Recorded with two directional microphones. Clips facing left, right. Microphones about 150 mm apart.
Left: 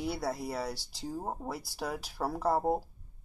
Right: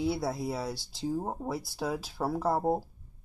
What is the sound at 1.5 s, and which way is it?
Speech, 20° right (ahead or behind).